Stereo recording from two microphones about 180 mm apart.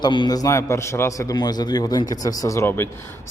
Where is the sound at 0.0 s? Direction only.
25° left (ahead or behind).